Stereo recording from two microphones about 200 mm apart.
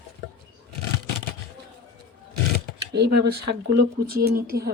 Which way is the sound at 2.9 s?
50° right (ahead or behind).